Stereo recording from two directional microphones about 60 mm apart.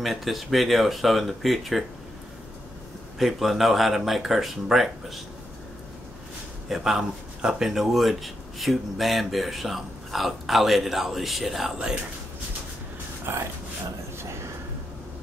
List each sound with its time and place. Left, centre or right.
0.0 s speech: centre
3.2 s speech: centre
6.7 s speech: centre
13.3 s speech: right